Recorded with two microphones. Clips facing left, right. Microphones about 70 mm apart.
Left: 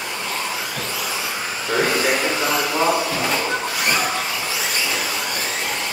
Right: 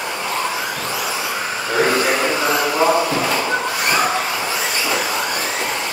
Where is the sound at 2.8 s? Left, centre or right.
Centre.